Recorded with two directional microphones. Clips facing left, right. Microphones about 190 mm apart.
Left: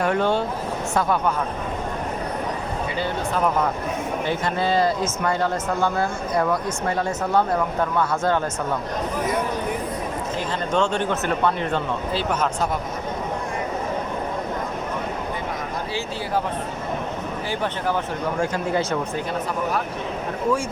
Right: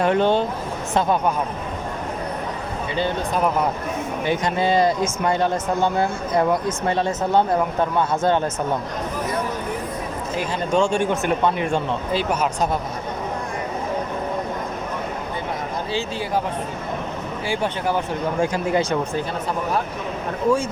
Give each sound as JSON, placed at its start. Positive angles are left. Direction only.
{"t": 0.0, "sound": "speech", "side_deg": -20}
{"t": 3.0, "sound": "speech", "side_deg": -15}
{"t": 10.3, "sound": "speech", "side_deg": -10}
{"t": 15.9, "sound": "speech", "side_deg": -20}
{"t": 17.5, "sound": "speech", "side_deg": -10}